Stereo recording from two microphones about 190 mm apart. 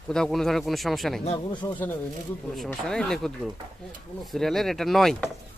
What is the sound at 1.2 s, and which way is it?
Speech, 25° left (ahead or behind).